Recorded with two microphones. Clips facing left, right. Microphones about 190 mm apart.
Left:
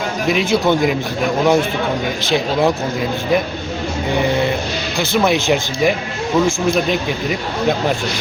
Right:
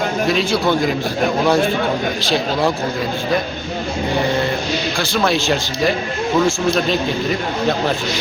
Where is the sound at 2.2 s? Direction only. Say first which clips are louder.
Left 4 dB; 20° left (ahead or behind).